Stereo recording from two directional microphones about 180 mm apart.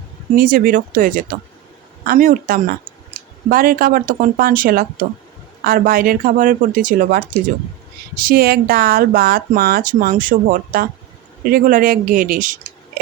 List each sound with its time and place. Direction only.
0.3 s speech: 50° right (ahead or behind)